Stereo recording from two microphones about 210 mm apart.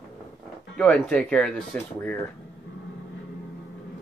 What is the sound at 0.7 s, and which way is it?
Speech, 5° left (ahead or behind).